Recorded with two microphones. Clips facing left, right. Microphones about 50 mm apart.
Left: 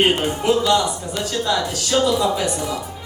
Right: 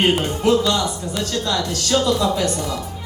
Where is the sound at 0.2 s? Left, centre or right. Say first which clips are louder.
Right 1 dB; centre.